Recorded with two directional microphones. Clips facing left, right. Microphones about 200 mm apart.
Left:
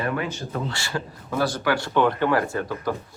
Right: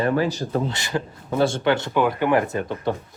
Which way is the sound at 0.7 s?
20° right (ahead or behind).